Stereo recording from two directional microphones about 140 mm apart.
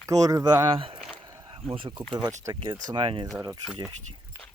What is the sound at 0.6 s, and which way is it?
Speech, 40° right (ahead or behind).